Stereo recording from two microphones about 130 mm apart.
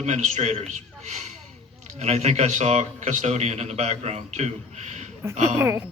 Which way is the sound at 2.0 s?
60° right (ahead or behind).